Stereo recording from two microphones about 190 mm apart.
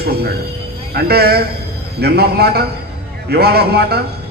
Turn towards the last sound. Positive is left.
turn(degrees=-55)  # may be behind; listen again after turning